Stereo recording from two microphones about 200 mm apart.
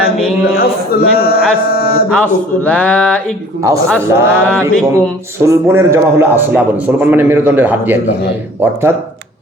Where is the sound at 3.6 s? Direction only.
15° right (ahead or behind).